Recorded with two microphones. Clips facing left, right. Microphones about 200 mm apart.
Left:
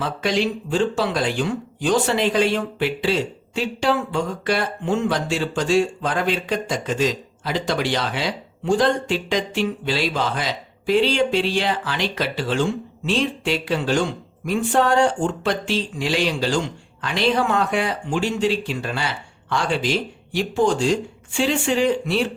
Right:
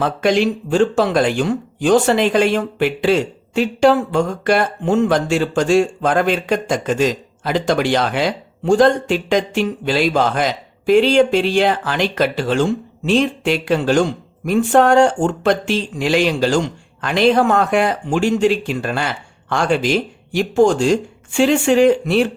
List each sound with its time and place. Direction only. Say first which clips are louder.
0.0 s speech: right 6 dB; 50° right (ahead or behind)
21.3 s speech: right 7 dB; 60° right (ahead or behind)